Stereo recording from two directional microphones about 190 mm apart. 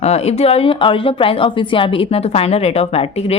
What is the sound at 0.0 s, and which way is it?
Speech, 35° left (ahead or behind).